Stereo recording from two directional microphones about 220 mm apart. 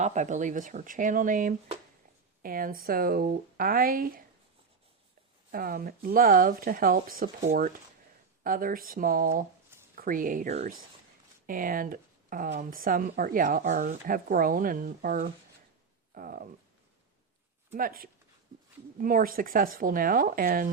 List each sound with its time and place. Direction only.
0.0 s speech: 35° right (ahead or behind)
5.5 s speech: 40° right (ahead or behind)
17.7 s speech: 40° right (ahead or behind)